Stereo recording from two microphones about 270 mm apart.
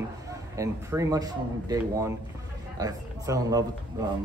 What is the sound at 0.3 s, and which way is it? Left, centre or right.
Speech, centre.